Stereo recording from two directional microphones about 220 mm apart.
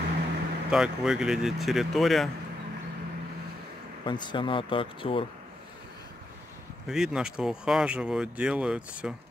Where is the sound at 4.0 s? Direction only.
20° left (ahead or behind).